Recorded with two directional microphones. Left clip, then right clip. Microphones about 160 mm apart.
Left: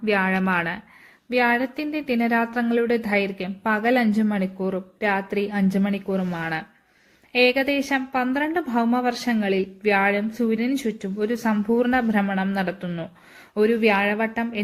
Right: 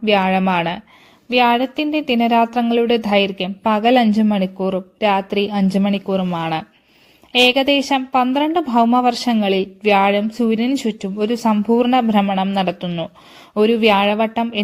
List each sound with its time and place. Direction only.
0.0 s a woman's voice: 35° right (ahead or behind)
1.3 s a woman's voice: 5° left (ahead or behind)
1.9 s a woman's voice: 35° right (ahead or behind)